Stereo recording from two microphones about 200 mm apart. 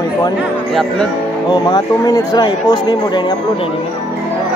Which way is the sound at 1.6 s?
20° left (ahead or behind).